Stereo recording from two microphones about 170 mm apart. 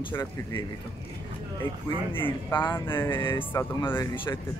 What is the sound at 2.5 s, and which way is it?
Speech, 25° left (ahead or behind).